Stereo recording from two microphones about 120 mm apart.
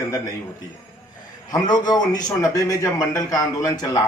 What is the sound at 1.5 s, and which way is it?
Speech, 35° left (ahead or behind).